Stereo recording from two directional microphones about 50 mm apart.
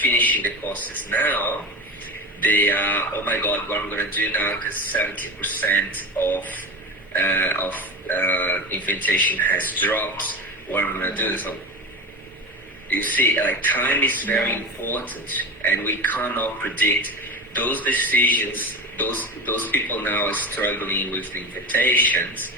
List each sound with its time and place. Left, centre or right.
0.0 s speech: left
12.9 s speech: left